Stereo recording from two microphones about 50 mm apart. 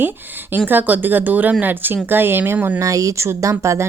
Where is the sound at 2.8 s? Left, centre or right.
Right.